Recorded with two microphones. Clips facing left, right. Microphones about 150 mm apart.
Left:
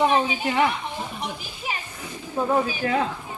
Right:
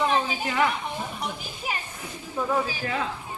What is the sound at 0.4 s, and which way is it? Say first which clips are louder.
Speech: left 2 dB; 30° left (ahead or behind).